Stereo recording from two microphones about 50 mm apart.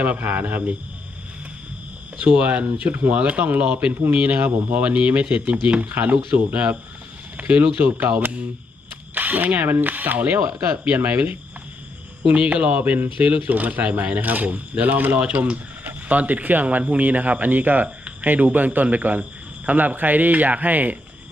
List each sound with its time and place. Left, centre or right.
0.2 s speech: right
2.1 s speech: right
3.2 s speech: right
7.9 s speech: right
9.1 s speech: right